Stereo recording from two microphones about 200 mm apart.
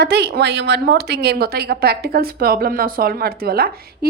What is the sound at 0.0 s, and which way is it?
A woman's voice, 55° right (ahead or behind).